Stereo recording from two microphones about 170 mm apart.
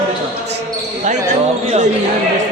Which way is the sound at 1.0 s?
45° right (ahead or behind).